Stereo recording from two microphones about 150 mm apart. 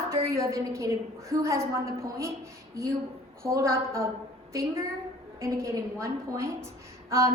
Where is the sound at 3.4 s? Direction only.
20° right (ahead or behind).